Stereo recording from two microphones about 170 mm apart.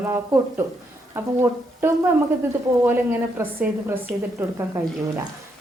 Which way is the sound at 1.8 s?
15° right (ahead or behind).